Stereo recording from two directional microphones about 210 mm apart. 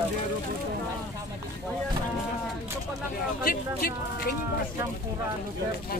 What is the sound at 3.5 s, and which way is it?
Speech, 45° left (ahead or behind).